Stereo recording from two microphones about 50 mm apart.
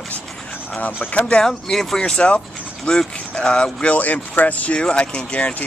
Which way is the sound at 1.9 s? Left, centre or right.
Centre.